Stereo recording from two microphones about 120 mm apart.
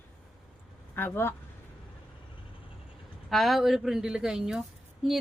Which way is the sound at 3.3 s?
Centre (ahead or behind).